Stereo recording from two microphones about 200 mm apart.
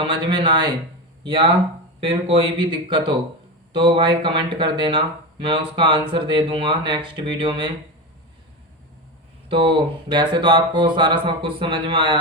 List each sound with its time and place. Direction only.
0.0 s speech: 25° right (ahead or behind)
2.0 s speech: 25° right (ahead or behind)
9.5 s speech: 25° right (ahead or behind)